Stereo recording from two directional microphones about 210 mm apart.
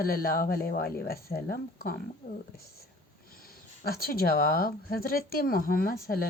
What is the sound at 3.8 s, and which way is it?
Speech, 45° left (ahead or behind).